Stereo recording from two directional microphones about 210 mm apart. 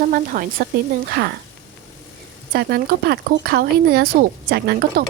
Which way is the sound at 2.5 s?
45° right (ahead or behind).